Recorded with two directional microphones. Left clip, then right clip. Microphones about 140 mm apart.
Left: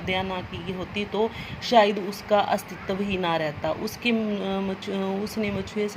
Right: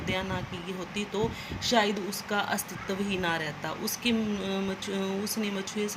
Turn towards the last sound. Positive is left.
turn(degrees=45)  # may be behind; listen again after turning